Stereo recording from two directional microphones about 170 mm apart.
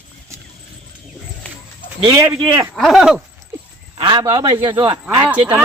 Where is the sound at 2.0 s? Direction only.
20° right (ahead or behind).